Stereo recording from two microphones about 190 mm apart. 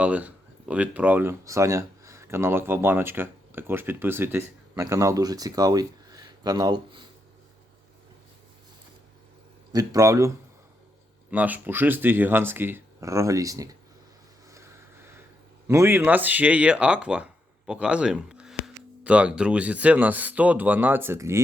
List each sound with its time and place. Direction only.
0.0 s speech: 10° right (ahead or behind)
9.7 s speech: 15° right (ahead or behind)
14.5 s a sound: 15° right (ahead or behind)
15.6 s speech: 15° right (ahead or behind)